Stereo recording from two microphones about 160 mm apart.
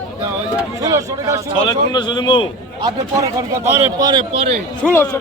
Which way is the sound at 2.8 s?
20° right (ahead or behind).